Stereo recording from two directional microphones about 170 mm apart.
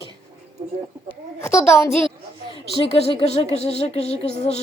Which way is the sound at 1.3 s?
15° left (ahead or behind).